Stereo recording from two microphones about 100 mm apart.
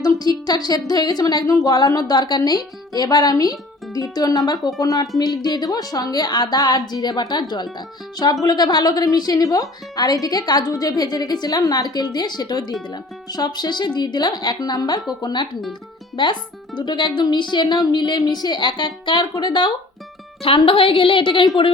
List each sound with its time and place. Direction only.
0.0 s a woman's voice: 40° left (ahead or behind)
20.4 s a woman's voice: 65° left (ahead or behind)